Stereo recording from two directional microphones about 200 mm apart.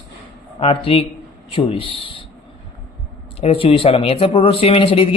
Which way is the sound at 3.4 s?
30° left (ahead or behind).